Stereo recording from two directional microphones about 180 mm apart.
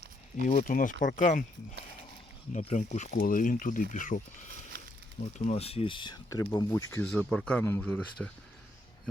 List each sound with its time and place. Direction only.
0.4 s speech: 45° left (ahead or behind)
2.5 s speech: 40° left (ahead or behind)
5.5 s speech: 35° left (ahead or behind); by 7.0 s 15° left (ahead or behind)
7.0 s speech: 5° left (ahead or behind)